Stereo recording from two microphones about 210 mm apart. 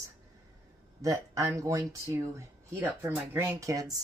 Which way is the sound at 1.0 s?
15° right (ahead or behind).